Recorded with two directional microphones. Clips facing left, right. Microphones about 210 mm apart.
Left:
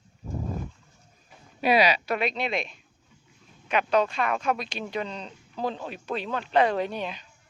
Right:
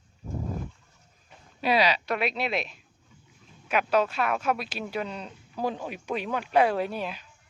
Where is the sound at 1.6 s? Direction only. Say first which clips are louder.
Left 2 dB; 15° left (ahead or behind).